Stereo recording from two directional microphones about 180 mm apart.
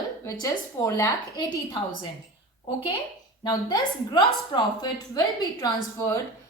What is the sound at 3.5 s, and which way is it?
A woman's voice, 25° left (ahead or behind).